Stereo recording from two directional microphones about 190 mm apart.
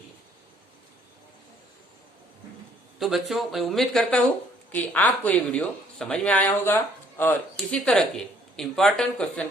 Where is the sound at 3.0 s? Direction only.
Centre (ahead or behind).